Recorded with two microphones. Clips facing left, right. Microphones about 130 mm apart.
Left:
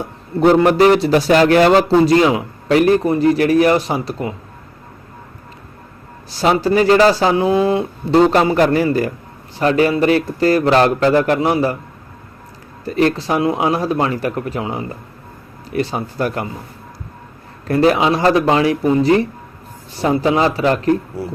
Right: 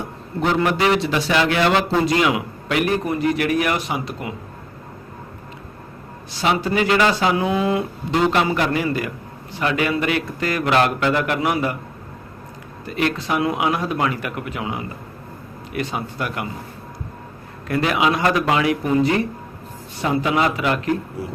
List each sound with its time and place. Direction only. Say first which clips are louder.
0.4 s speech: left 8 dB; 40° left (ahead or behind)
6.3 s speech: left 6 dB; 35° left (ahead or behind)
12.8 s speech: left 6 dB; 35° left (ahead or behind)
17.7 s speech: left 6 dB; 35° left (ahead or behind)